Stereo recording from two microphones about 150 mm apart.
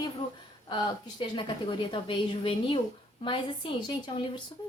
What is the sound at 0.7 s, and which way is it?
A woman's voice, 30° left (ahead or behind).